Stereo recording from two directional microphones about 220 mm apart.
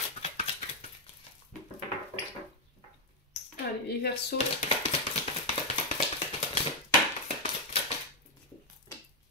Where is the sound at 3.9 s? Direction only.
45° left (ahead or behind).